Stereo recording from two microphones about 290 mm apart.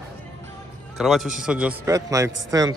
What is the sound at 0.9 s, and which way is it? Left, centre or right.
A man's voice, centre.